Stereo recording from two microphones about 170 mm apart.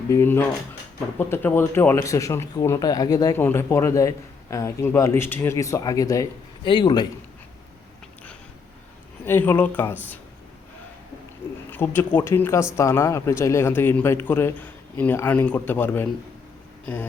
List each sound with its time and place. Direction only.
0.1 s a man's voice: 15° left (ahead or behind)
9.2 s speech: 10° left (ahead or behind)
11.7 s speech: 10° left (ahead or behind)